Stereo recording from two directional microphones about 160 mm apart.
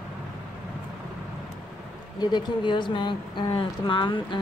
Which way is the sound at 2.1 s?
30° left (ahead or behind).